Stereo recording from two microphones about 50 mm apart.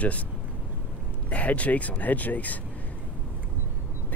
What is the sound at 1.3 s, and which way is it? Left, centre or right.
Speech, left.